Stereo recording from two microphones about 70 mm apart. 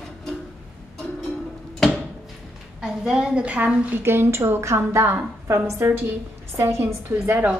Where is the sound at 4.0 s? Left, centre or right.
Right.